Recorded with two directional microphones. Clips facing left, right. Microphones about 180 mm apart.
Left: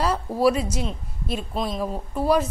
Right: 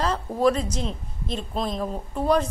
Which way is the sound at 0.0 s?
10° left (ahead or behind).